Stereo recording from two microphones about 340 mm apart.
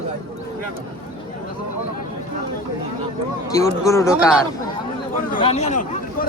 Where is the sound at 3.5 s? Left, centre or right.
Centre.